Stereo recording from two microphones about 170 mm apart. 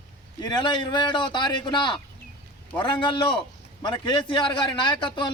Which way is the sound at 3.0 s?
30° left (ahead or behind).